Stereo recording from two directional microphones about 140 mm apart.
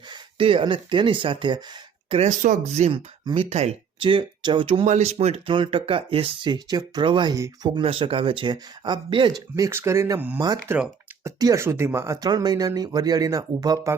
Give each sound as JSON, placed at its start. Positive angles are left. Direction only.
{"t": 0.1, "sound": "speech", "side_deg": -40}
{"t": 2.0, "sound": "speech", "side_deg": -45}
{"t": 2.4, "sound": "speech", "side_deg": -60}
{"t": 2.9, "sound": "speech", "side_deg": -40}
{"t": 4.9, "sound": "speech", "side_deg": -55}
{"t": 5.1, "sound": "speech", "side_deg": -45}
{"t": 7.3, "sound": "speech", "side_deg": -20}
{"t": 7.8, "sound": "speech", "side_deg": -40}
{"t": 9.6, "sound": "speech", "side_deg": -20}